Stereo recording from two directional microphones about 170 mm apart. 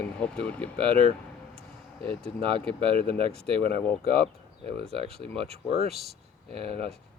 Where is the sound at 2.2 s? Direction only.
30° right (ahead or behind).